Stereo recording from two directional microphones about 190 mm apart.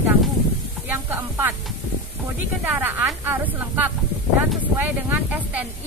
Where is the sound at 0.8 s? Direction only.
10° right (ahead or behind).